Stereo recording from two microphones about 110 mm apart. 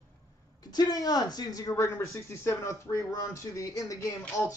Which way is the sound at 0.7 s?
35° left (ahead or behind).